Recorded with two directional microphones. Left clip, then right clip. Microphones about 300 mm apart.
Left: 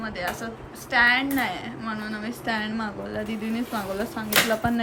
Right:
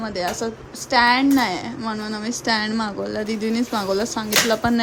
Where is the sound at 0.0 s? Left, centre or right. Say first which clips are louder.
Right 6 dB; centre.